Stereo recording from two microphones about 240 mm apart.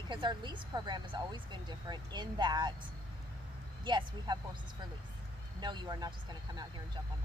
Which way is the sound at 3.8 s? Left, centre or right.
Centre.